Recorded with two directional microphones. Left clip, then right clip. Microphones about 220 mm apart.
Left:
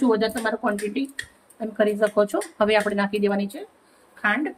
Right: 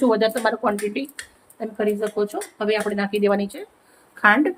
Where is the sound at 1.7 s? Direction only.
15° left (ahead or behind).